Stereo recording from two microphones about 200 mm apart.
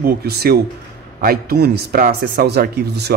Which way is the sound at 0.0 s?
50° right (ahead or behind).